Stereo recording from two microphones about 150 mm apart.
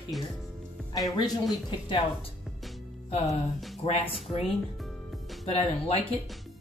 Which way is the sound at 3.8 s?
40° left (ahead or behind).